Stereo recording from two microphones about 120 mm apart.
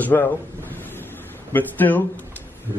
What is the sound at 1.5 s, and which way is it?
Speech, 15° left (ahead or behind).